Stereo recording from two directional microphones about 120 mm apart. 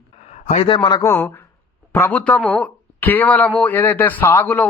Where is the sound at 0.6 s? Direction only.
40° left (ahead or behind).